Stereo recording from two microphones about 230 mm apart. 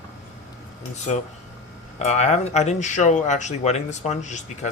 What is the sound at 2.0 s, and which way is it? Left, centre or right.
Speech, left.